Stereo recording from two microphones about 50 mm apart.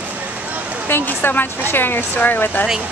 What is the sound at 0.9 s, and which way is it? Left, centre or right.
Speech, left.